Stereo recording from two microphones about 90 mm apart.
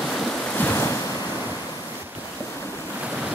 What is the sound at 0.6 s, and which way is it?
Waves, 25° left (ahead or behind).